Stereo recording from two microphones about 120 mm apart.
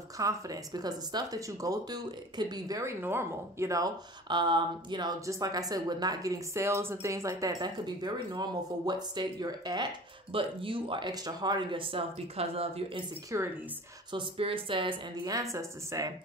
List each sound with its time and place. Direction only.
0.2 s a woman's voice: 30° right (ahead or behind)
2.8 s a woman's voice: 20° right (ahead or behind); by 5.1 s 40° right (ahead or behind)
5.2 s a woman's voice: 30° right (ahead or behind)
10.3 s speech: 45° right (ahead or behind)
11.1 s speech: 35° right (ahead or behind); by 13.0 s 55° right (ahead or behind)
13.3 s a woman's voice: 25° right (ahead or behind)
14.1 s speech: 50° right (ahead or behind)
15.2 s a woman's voice: 30° right (ahead or behind)